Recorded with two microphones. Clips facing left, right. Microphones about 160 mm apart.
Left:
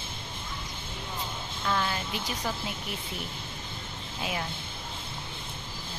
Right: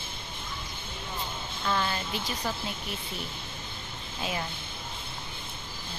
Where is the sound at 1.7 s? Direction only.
Centre (ahead or behind).